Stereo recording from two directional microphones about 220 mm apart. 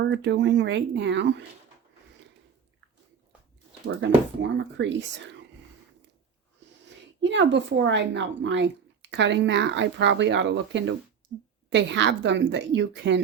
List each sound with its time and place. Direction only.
0.0 s speech: 50° right (ahead or behind)
4.4 s speech: 55° right (ahead or behind)
6.8 s speech: 55° right (ahead or behind)